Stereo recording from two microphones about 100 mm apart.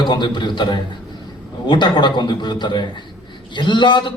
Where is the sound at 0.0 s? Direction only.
50° left (ahead or behind).